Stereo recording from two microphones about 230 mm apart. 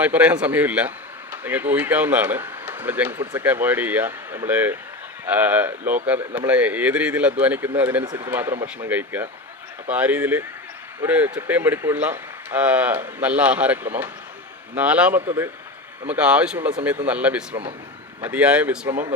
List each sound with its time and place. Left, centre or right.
0.0 s speech: centre
17.5 s speech: right
18.2 s speech: centre